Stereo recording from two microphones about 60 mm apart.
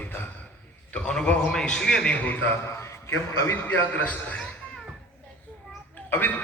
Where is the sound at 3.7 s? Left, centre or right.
Left.